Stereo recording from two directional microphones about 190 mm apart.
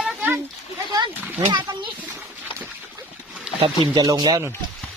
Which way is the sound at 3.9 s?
20° right (ahead or behind).